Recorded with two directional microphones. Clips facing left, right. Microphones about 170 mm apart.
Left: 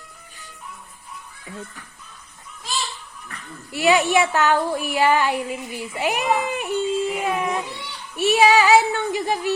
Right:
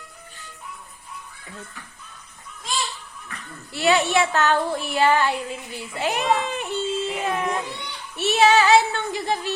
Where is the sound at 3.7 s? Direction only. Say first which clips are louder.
Left 2 dB; 15° left (ahead or behind).